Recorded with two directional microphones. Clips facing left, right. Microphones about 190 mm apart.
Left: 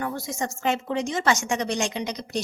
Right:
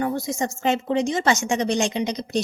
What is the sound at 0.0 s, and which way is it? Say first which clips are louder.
Speech: right 5 dB; 20° right (ahead or behind).